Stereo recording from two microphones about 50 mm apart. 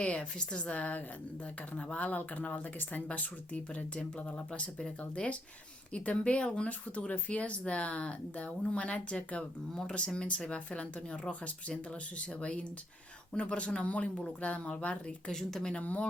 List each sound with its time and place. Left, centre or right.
0.0 s speech: left
15.3 s speech: centre
15.8 s speech: left